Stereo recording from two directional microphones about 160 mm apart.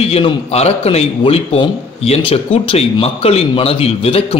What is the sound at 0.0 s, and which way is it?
A man's voice, 40° left (ahead or behind).